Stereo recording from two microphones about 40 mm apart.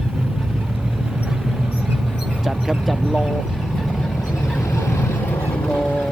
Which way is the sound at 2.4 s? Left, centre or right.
Centre.